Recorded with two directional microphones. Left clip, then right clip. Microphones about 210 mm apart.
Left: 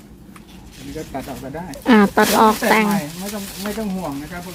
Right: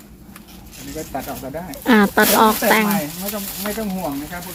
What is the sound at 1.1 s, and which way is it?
Speech, 15° right (ahead or behind).